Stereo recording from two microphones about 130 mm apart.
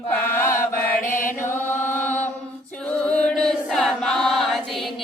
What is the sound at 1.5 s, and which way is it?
Chant, 15° left (ahead or behind).